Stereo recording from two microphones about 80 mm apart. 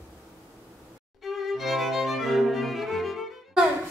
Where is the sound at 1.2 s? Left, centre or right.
Centre.